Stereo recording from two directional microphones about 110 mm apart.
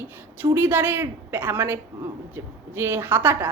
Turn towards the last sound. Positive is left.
turn(degrees=-20)  # may be behind; listen again after turning